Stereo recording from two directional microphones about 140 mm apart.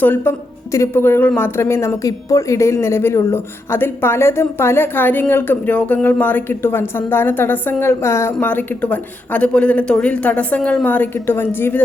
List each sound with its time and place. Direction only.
0.0 s speech: 15° left (ahead or behind)